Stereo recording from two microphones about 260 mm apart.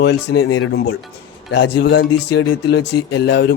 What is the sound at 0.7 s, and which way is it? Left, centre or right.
Speech, left.